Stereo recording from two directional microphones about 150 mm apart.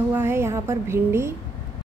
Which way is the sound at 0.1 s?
15° right (ahead or behind).